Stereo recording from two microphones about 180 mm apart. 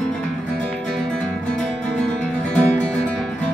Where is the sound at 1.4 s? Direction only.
5° left (ahead or behind).